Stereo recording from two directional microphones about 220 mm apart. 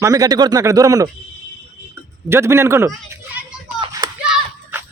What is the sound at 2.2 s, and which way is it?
A man's voice, 10° right (ahead or behind).